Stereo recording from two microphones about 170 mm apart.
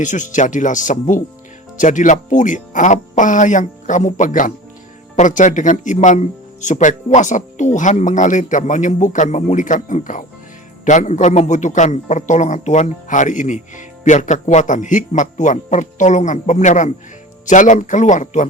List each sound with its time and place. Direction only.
0.0 s a man's voice: 45° left (ahead or behind)